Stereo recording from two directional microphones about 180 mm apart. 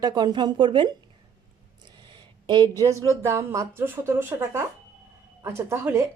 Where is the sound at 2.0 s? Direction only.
25° right (ahead or behind).